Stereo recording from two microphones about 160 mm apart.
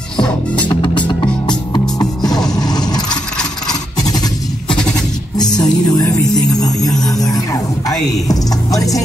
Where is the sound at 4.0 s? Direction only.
25° left (ahead or behind).